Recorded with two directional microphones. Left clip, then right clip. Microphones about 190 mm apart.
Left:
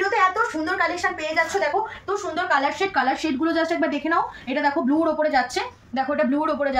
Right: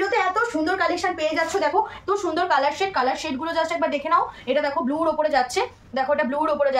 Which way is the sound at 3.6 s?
55° right (ahead or behind).